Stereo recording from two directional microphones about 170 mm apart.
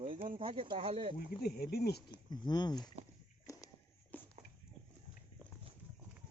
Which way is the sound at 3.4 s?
20° left (ahead or behind).